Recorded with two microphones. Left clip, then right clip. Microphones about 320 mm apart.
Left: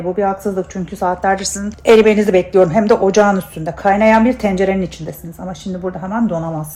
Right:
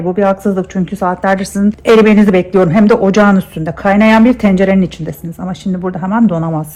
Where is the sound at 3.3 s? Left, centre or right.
Right.